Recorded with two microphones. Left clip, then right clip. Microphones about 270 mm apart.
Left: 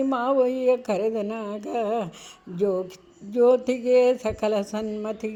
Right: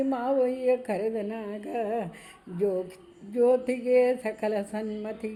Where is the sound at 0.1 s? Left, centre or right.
Left.